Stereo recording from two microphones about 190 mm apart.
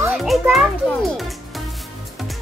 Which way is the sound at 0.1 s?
Centre (ahead or behind).